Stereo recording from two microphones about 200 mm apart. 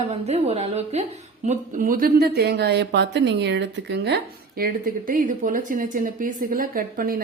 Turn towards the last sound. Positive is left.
turn(degrees=-45)  # may be behind; listen again after turning